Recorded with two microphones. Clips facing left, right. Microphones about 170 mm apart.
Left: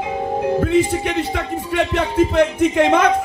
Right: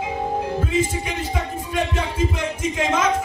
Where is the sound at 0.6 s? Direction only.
65° left (ahead or behind).